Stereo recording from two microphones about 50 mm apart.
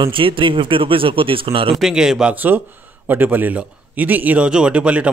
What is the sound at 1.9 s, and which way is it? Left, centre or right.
Speech, centre.